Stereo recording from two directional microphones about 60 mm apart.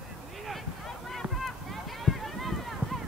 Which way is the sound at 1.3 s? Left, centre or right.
Centre.